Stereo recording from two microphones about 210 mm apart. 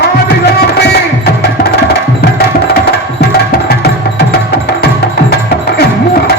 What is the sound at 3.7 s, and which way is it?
Music, 50° left (ahead or behind).